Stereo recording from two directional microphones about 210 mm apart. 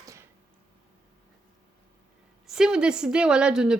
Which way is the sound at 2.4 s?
5° right (ahead or behind).